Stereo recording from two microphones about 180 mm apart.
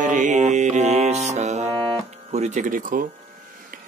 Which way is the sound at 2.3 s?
40° right (ahead or behind).